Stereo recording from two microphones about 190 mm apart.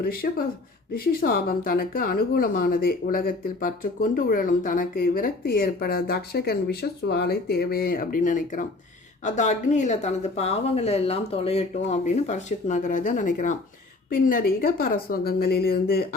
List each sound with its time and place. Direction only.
0.0 s a woman's voice: 50° left (ahead or behind)